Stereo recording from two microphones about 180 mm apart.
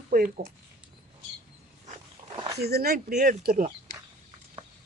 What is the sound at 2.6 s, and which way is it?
Speech, 60° right (ahead or behind).